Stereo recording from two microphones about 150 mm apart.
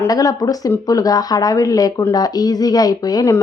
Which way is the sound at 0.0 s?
25° left (ahead or behind).